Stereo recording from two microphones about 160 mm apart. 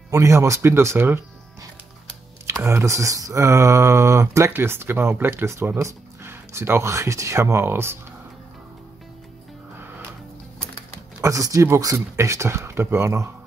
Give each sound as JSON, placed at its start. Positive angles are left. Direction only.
{"t": 0.1, "sound": "speech", "side_deg": -20}
{"t": 2.4, "sound": "speech", "side_deg": -15}
{"t": 11.1, "sound": "speech", "side_deg": -20}